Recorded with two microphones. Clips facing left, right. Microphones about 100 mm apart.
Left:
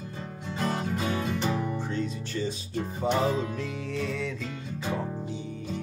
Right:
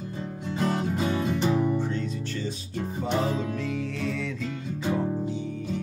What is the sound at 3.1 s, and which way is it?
Music, 5° left (ahead or behind).